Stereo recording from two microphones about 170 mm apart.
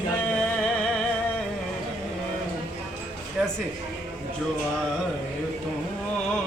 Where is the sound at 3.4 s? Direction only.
5° right (ahead or behind).